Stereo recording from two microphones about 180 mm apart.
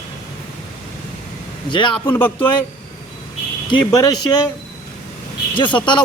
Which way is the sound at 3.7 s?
20° left (ahead or behind).